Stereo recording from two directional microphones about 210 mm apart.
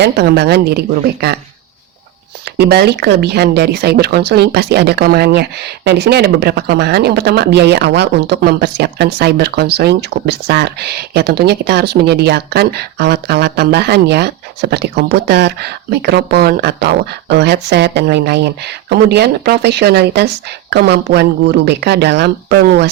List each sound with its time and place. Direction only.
0.0 s speech: 50° right (ahead or behind)
2.4 s speech: 50° right (ahead or behind)